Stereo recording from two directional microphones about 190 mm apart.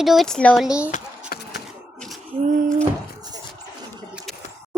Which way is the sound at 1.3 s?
50° left (ahead or behind).